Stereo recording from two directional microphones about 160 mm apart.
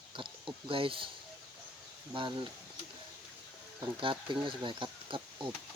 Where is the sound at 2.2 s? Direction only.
30° right (ahead or behind).